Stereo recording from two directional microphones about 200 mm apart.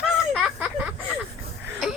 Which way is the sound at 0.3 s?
5° right (ahead or behind).